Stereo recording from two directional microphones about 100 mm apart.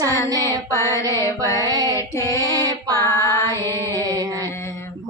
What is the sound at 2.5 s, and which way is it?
Female singing, 40° right (ahead or behind).